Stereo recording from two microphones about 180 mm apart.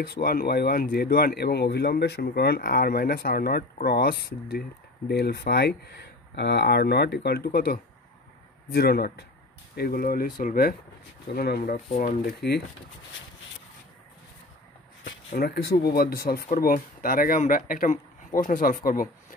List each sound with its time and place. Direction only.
0.0 s speech: 55° left (ahead or behind)
15.0 s speech: 60° left (ahead or behind)